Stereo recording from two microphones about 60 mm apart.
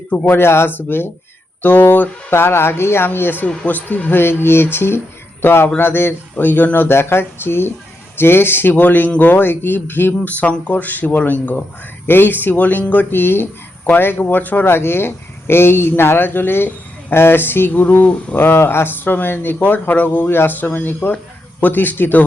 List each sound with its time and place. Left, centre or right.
0.1 s speech: left
6.3 s speech: left
12.0 s speech: left
13.1 s speech: left
18.3 s speech: left